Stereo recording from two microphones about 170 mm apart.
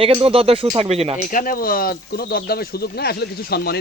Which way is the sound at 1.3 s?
55° left (ahead or behind).